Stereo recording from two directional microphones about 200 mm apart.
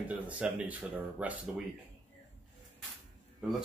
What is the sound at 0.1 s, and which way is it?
Speech, 5° right (ahead or behind).